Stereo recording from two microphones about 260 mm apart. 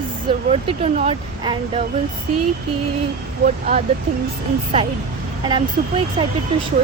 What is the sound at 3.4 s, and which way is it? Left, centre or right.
Speech, right.